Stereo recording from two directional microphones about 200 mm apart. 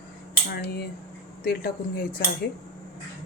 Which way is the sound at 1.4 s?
50° left (ahead or behind).